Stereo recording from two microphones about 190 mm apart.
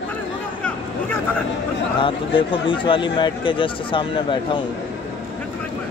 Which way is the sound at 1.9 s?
25° left (ahead or behind).